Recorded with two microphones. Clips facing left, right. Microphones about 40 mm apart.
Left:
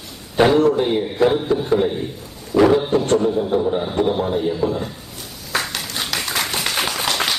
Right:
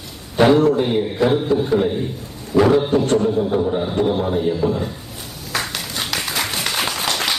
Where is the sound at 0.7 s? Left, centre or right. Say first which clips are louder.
Right 1 dB; centre.